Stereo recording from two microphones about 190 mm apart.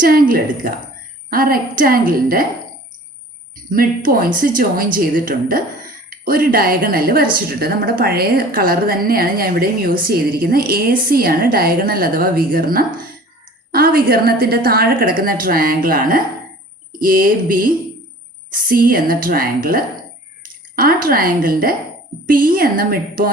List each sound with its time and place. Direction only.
0.0 s a woman's voice: 50° right (ahead or behind)
3.5 s a woman's voice: 45° right (ahead or behind)